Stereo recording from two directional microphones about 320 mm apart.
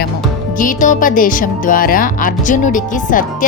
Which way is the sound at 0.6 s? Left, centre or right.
Left.